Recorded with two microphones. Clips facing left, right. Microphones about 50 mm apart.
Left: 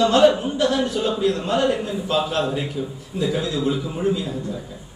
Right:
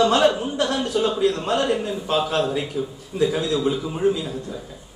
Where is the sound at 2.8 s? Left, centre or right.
Right.